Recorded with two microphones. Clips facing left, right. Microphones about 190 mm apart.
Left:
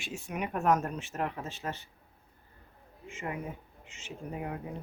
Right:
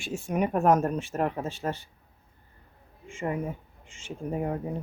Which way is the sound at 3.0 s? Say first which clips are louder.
Right 7 dB; 40° right (ahead or behind).